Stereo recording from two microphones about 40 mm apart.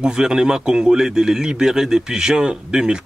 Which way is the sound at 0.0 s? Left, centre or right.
Centre.